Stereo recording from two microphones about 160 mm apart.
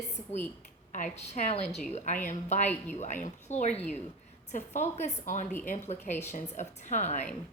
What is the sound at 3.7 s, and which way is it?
Speech, 10° left (ahead or behind).